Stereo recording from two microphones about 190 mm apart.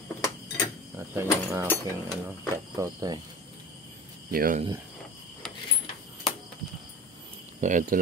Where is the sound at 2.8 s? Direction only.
20° right (ahead or behind).